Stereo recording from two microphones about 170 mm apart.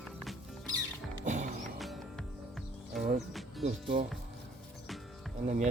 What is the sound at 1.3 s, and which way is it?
Music, 45° right (ahead or behind).